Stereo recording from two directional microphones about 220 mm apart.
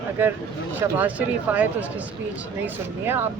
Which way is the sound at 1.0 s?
5° right (ahead or behind).